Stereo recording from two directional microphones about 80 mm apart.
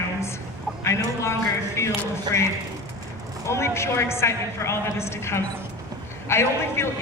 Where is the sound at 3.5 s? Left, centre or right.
Left.